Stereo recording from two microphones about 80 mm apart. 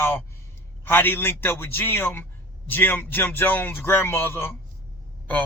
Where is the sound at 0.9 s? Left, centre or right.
Left.